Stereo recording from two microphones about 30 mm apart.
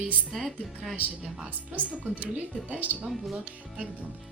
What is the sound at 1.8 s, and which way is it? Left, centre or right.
Speech, right.